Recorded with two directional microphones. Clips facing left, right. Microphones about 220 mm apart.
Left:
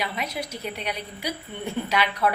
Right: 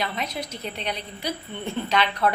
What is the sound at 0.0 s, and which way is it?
A woman's voice, 10° left (ahead or behind).